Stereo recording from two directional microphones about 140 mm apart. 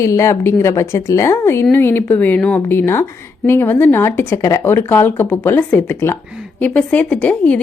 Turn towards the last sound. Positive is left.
turn(degrees=10)  # may be behind; listen again after turning